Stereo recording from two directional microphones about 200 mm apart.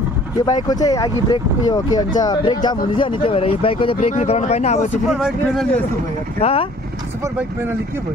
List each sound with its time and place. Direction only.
0.5 s speech: 20° left (ahead or behind)
5.0 s speech: centre (ahead or behind)
6.4 s speech: 30° left (ahead or behind)